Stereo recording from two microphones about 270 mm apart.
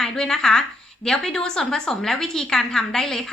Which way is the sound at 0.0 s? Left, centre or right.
Centre.